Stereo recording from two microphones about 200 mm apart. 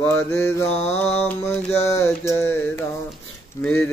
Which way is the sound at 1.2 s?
5° left (ahead or behind).